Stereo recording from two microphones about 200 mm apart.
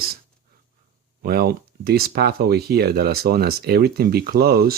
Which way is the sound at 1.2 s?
50° right (ahead or behind).